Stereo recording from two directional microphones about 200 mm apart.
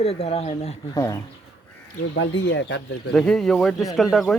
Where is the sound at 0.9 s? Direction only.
15° left (ahead or behind).